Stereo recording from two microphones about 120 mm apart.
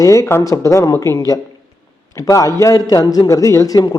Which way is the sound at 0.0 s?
25° left (ahead or behind).